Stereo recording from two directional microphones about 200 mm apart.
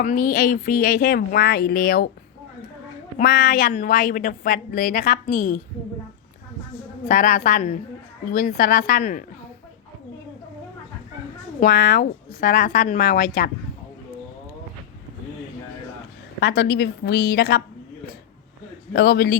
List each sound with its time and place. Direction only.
0.0 s a woman's voice: 40° left (ahead or behind)
3.2 s a woman's voice: 45° left (ahead or behind)
7.1 s a woman's voice: 40° left (ahead or behind)
11.6 s a woman's voice: 45° left (ahead or behind)
16.4 s a woman's voice: 55° left (ahead or behind)
18.9 s a woman's voice: 50° left (ahead or behind)